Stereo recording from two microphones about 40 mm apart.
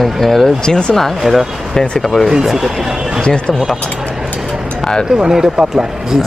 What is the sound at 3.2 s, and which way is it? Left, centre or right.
Speech, left.